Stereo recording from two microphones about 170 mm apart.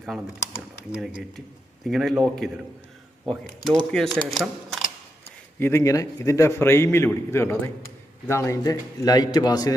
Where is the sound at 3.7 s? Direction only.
Centre (ahead or behind).